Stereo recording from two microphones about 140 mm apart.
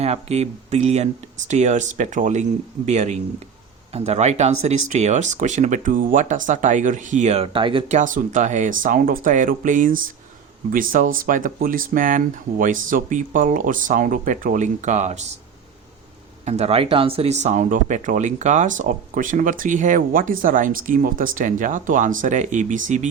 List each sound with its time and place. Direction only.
0.0 s speech: 50° right (ahead or behind)
7.9 s speech: 65° right (ahead or behind)
16.5 s speech: 50° right (ahead or behind)